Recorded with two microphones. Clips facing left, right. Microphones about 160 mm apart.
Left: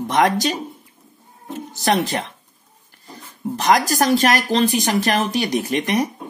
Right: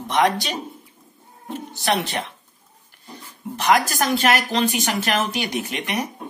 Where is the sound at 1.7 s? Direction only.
40° left (ahead or behind).